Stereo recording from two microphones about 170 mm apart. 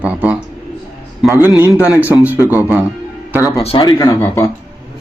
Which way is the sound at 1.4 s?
10° right (ahead or behind).